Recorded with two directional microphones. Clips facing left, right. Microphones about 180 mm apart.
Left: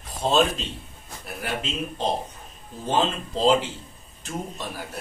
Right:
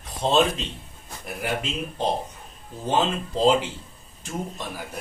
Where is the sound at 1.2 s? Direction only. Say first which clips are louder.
Right 2 dB; 15° right (ahead or behind).